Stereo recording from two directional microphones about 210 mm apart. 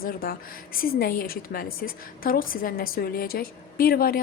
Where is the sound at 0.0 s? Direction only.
45° left (ahead or behind).